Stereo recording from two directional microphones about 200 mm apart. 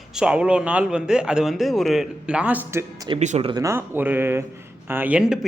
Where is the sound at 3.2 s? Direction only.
35° right (ahead or behind).